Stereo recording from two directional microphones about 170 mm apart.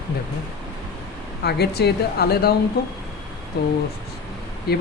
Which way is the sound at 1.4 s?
70° left (ahead or behind).